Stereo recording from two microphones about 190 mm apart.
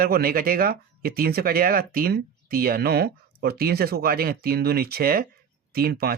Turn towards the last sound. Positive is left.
turn(degrees=-55)  # may be behind; listen again after turning